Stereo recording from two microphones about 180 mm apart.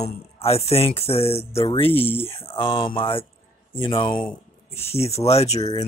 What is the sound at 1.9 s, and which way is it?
Speech, 10° left (ahead or behind).